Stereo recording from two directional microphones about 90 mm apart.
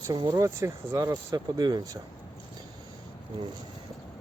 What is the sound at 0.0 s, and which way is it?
Speech, 45° right (ahead or behind).